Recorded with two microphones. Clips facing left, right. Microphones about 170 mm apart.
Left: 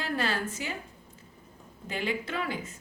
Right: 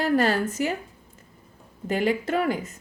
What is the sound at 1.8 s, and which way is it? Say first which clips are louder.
Speech: right 9 dB; 45° right (ahead or behind).